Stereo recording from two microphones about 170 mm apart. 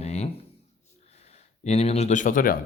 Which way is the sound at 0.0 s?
40° left (ahead or behind).